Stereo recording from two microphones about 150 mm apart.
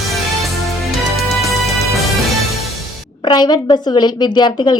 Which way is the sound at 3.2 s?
30° left (ahead or behind).